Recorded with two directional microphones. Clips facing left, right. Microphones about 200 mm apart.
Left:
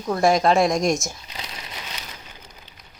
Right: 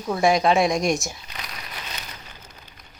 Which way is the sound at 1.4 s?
25° left (ahead or behind).